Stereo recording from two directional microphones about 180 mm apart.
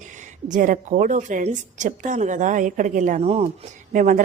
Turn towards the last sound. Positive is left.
turn(degrees=-45)  # may be behind; listen again after turning